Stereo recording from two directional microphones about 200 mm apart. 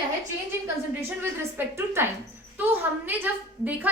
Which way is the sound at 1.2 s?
10° right (ahead or behind).